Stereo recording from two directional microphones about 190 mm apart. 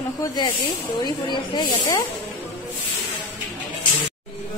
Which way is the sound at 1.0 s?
20° left (ahead or behind).